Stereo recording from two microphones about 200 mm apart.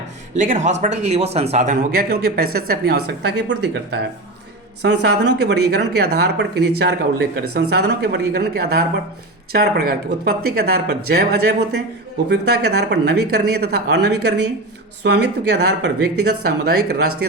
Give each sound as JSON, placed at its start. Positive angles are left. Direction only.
{"t": 0.3, "sound": "speech", "side_deg": -40}
{"t": 3.0, "sound": "speech", "side_deg": -60}
{"t": 7.7, "sound": "speech", "side_deg": -55}